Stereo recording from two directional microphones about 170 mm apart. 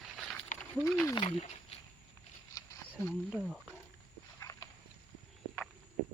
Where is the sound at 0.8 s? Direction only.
15° left (ahead or behind).